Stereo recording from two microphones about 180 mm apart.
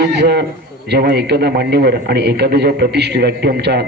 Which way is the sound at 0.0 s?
65° right (ahead or behind).